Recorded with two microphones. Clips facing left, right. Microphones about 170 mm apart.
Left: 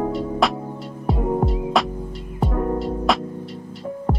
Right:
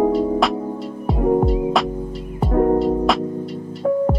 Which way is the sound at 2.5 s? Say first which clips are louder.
Right 9 dB; 45° right (ahead or behind).